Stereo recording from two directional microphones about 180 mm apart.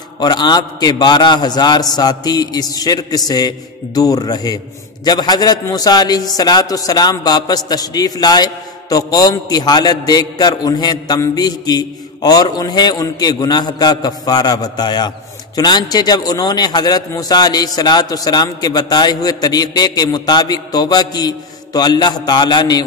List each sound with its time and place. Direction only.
0.2 s a man's voice: 25° left (ahead or behind)